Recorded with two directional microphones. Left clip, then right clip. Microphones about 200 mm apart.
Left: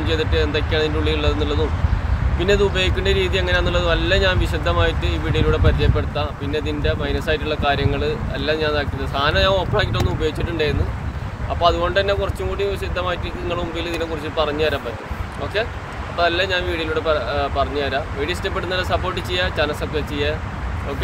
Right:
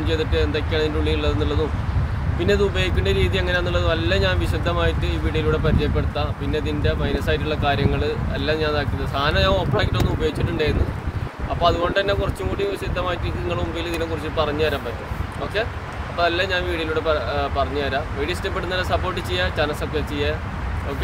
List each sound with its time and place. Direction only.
0.0 s speech: centre (ahead or behind)
16.2 s speech: centre (ahead or behind)